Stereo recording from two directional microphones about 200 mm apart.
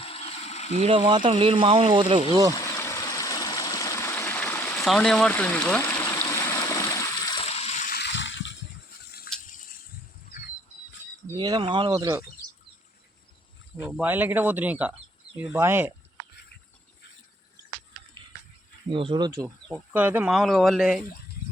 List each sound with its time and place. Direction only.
0.0 s a sound: 30° left (ahead or behind)
0.8 s speech: 30° right (ahead or behind)
2.6 s stream: 15° left (ahead or behind)
7.4 s water: 30° left (ahead or behind)
7.9 s water: 60° left (ahead or behind)
9.5 s a sound: 40° left (ahead or behind)
11.3 s speech: 20° right (ahead or behind)
13.8 s speech: 5° right (ahead or behind)
18.9 s speech: 25° right (ahead or behind); by 21.0 s centre (ahead or behind)